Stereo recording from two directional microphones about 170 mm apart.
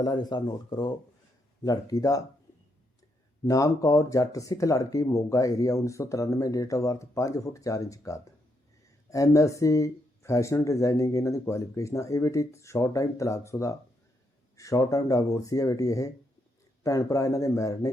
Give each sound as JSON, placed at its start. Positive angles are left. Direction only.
{"t": 0.0, "sound": "speech", "side_deg": 25}
{"t": 3.4, "sound": "speech", "side_deg": 20}